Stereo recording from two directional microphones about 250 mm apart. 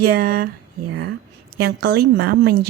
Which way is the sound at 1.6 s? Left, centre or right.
Right.